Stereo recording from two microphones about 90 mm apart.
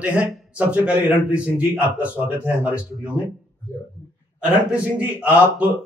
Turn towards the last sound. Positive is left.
turn(degrees=-15)  # may be behind; listen again after turning